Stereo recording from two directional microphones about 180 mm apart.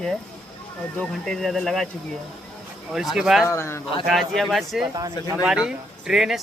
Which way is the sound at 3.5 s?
15° left (ahead or behind).